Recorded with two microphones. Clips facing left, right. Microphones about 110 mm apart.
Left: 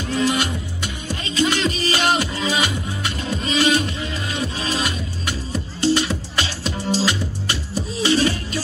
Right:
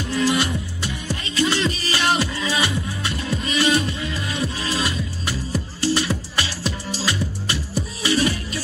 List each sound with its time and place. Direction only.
0.1 s music: 25° left (ahead or behind)